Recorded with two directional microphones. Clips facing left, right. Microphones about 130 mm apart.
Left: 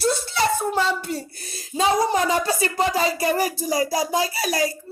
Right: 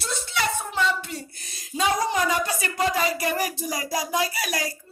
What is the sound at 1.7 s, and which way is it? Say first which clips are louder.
Speech: left 4 dB; 35° left (ahead or behind).